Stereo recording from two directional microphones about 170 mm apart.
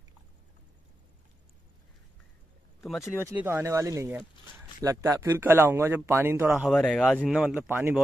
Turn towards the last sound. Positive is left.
turn(degrees=-10)  # may be behind; listen again after turning